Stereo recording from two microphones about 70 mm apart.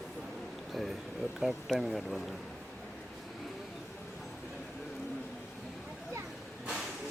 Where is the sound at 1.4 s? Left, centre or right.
Centre.